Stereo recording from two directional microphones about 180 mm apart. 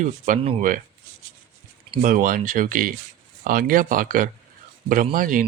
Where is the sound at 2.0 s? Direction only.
50° right (ahead or behind).